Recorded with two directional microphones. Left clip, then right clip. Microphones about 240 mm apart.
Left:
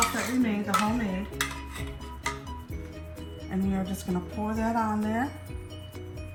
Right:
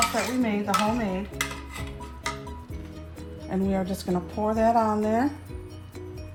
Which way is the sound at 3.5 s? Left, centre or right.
Right.